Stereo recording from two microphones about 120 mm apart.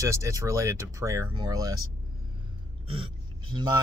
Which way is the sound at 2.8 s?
50° right (ahead or behind).